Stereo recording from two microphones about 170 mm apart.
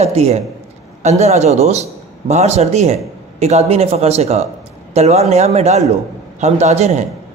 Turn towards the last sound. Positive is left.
turn(degrees=-40)  # may be behind; listen again after turning